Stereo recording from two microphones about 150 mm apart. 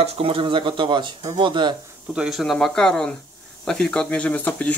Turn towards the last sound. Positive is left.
turn(degrees=10)  # may be behind; listen again after turning